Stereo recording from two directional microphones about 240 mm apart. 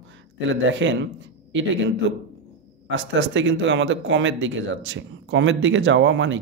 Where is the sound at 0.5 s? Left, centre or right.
Right.